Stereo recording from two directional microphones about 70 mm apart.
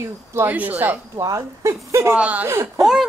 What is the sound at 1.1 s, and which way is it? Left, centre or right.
Speech, right.